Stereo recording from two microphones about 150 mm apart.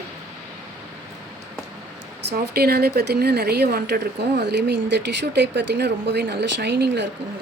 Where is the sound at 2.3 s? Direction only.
90° right.